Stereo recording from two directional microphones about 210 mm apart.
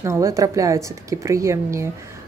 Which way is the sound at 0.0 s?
15° right (ahead or behind).